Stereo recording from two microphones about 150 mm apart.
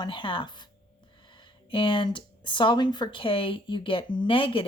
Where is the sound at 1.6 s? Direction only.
35° left (ahead or behind).